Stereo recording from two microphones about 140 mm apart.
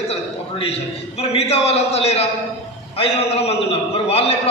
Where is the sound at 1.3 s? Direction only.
45° left (ahead or behind).